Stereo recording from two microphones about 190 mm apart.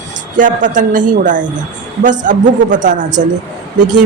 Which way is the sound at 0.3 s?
45° right (ahead or behind).